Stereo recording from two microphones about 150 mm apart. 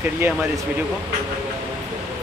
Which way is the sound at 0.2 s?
20° right (ahead or behind).